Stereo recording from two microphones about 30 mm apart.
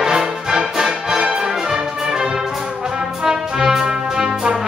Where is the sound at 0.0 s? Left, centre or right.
Right.